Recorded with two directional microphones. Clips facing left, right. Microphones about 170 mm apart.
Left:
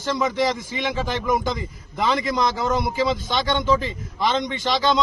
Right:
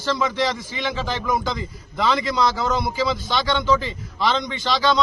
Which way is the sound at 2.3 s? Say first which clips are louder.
Even; 20° left (ahead or behind).